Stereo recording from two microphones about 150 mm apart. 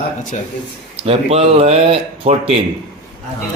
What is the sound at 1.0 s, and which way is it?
Speech, 40° right (ahead or behind).